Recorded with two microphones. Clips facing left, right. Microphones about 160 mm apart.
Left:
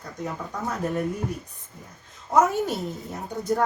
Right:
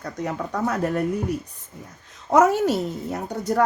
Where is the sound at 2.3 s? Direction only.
80° right.